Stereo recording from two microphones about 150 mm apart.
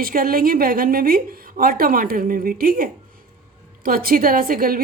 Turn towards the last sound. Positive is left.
turn(degrees=-75)  # may be behind; listen again after turning